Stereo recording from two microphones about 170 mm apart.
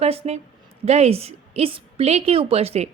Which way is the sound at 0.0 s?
35° right (ahead or behind).